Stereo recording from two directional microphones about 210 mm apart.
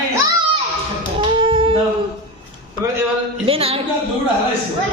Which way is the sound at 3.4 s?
25° right (ahead or behind).